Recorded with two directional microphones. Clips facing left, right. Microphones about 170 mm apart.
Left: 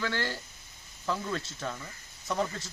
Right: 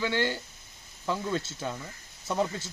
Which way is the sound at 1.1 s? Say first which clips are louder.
Right 3 dB; 25° right (ahead or behind).